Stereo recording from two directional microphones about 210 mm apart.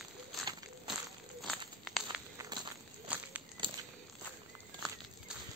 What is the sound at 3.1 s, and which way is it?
Walk, 5° right (ahead or behind).